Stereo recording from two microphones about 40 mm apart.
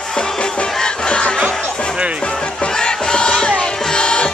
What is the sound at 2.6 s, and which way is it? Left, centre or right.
Music, left.